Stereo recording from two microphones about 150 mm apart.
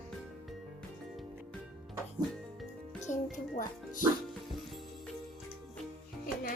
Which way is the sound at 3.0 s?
60° left (ahead or behind).